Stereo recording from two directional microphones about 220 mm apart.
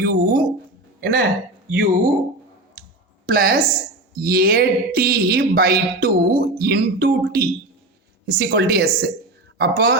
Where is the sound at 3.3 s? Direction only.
45° right (ahead or behind).